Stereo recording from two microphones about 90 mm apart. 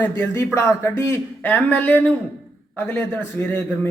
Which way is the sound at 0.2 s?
25° left (ahead or behind).